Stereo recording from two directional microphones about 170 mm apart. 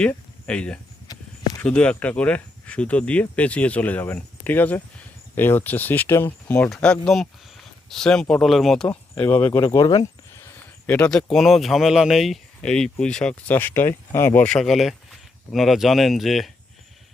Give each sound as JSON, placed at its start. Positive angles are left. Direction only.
{"t": 0.0, "sound": "speech", "side_deg": 5}
{"t": 1.0, "sound": "a sound", "side_deg": 20}
{"t": 1.6, "sound": "speech", "side_deg": 5}
{"t": 9.5, "sound": "speech", "side_deg": 30}
{"t": 10.8, "sound": "speech", "side_deg": 10}